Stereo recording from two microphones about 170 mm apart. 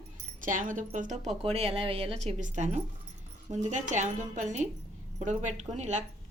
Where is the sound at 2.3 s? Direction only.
45° right (ahead or behind).